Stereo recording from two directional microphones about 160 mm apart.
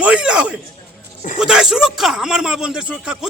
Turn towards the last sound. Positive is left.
turn(degrees=-5)  # may be behind; listen again after turning